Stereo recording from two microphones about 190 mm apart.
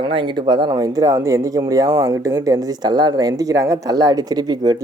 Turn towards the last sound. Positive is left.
turn(degrees=-20)  # may be behind; listen again after turning